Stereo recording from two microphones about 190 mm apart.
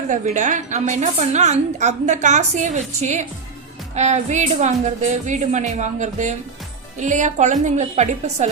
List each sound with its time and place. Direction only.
0.1 s a woman's voice: 40° right (ahead or behind)